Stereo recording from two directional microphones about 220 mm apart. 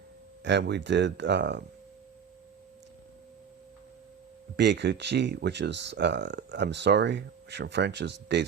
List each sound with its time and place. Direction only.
0.4 s speech: 50° right (ahead or behind)
4.5 s speech: 50° right (ahead or behind)